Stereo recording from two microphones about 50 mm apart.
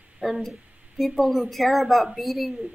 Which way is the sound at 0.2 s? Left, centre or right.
Centre.